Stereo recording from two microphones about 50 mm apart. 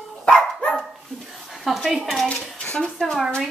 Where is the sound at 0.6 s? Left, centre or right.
Centre.